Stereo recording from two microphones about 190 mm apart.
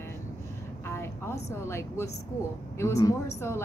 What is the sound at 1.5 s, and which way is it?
Speech, 15° left (ahead or behind).